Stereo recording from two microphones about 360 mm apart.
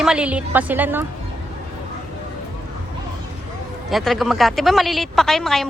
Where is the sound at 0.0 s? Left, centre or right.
Centre.